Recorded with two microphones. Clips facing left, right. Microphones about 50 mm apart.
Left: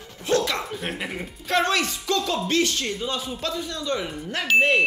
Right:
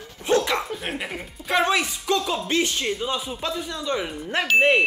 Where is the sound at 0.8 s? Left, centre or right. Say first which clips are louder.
Even; centre.